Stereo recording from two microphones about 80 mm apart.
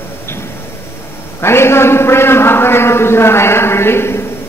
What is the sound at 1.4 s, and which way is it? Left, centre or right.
A man's voice, left.